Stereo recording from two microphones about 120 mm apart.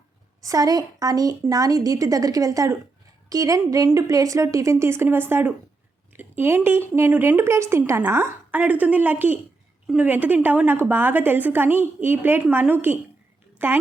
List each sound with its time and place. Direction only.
0.4 s a woman's voice: 30° right (ahead or behind)